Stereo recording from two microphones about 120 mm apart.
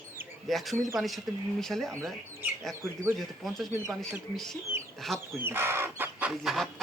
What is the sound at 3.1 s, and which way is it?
Speech, centre (ahead or behind).